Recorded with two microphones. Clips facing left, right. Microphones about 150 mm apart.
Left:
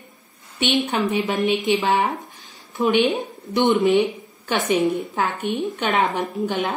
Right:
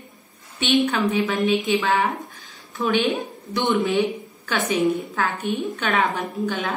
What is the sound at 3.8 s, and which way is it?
A woman's voice, 20° left (ahead or behind).